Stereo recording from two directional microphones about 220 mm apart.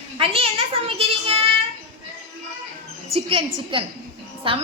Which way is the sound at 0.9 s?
25° right (ahead or behind).